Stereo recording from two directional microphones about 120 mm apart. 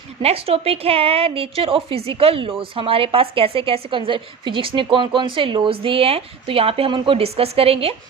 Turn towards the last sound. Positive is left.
turn(degrees=-55)  # may be behind; listen again after turning